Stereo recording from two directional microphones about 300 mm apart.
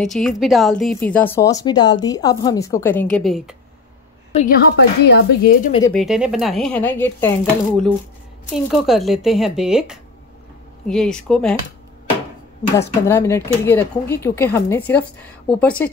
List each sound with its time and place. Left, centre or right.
0.0 s speech: centre
4.3 s a woman's voice: left
4.7 s speech: left
5.9 s a woman's voice: centre
8.5 s a woman's voice: centre
12.7 s speech: centre